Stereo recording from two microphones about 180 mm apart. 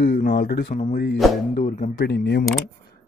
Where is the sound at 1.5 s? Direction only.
50° left (ahead or behind); by 2.4 s 70° left (ahead or behind).